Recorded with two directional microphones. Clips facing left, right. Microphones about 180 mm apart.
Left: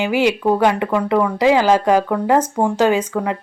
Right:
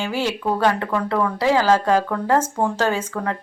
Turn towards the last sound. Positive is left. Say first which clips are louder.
# left 5 dB
turn(degrees=15)  # may be behind; listen again after turning